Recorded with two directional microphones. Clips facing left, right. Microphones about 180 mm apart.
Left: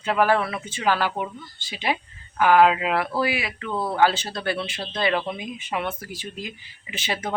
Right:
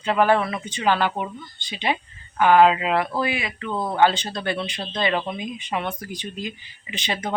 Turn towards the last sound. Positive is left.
turn(degrees=5)  # may be behind; listen again after turning